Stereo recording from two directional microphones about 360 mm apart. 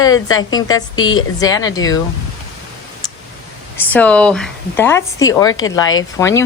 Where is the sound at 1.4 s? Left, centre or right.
Centre.